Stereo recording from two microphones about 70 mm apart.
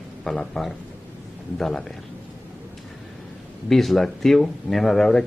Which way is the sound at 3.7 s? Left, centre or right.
Centre.